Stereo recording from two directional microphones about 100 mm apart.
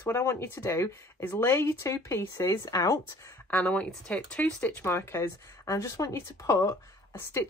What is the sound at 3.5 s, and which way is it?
Speech, 10° left (ahead or behind).